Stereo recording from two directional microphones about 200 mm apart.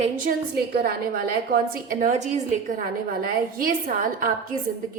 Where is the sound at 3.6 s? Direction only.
45° right (ahead or behind).